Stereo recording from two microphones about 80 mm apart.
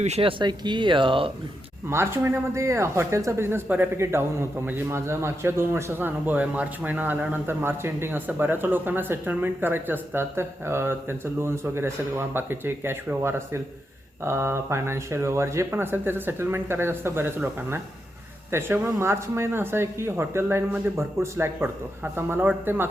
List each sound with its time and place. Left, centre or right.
0.3 s speech: right
1.9 s speech: right
18.5 s speech: right